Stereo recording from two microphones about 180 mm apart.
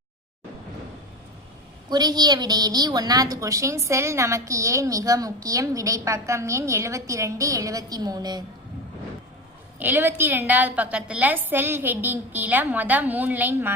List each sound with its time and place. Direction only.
1.9 s a woman's voice: 20° right (ahead or behind)
9.7 s a woman's voice: 10° right (ahead or behind)